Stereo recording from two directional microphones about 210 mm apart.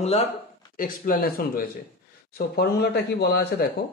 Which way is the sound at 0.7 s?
40° left (ahead or behind).